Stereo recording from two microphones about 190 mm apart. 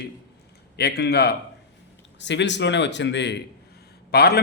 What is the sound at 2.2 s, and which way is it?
A man's voice, 70° left (ahead or behind).